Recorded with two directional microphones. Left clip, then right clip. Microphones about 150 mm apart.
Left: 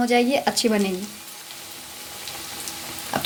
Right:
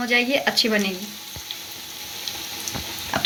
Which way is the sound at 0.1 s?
90° left.